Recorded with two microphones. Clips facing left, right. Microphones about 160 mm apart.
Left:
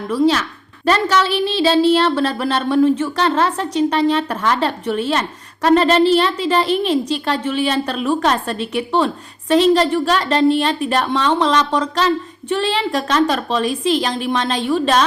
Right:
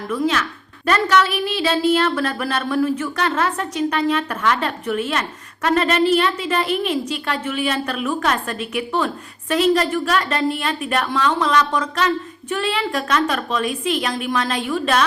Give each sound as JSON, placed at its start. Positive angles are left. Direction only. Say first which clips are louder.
{"t": 0.1, "sound": "a woman's voice", "louder": "left 5 dB", "side_deg": 30}